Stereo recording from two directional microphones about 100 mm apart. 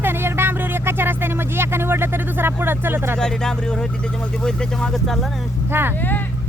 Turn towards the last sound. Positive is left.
turn(degrees=-20)  # may be behind; listen again after turning